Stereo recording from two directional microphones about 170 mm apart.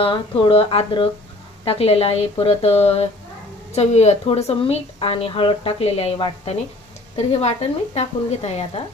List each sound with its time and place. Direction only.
0.0 s a woman's voice: 30° left (ahead or behind)